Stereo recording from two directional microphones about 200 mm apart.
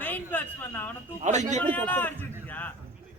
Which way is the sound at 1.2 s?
35° right (ahead or behind).